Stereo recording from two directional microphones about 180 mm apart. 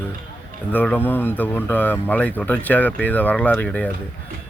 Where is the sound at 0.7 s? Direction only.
10° left (ahead or behind).